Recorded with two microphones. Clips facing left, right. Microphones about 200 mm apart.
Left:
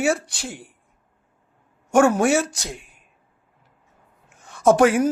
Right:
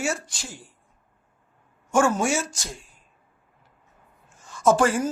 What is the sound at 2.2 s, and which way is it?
Speech, 60° left (ahead or behind).